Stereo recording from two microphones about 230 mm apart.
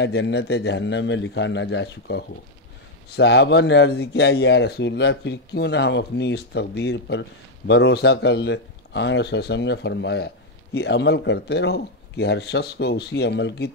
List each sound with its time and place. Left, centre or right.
0.0 s speech: left